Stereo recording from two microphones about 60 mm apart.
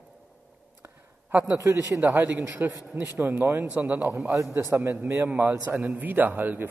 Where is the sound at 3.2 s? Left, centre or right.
Right.